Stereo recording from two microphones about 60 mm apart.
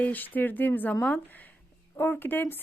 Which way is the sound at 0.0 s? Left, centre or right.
Left.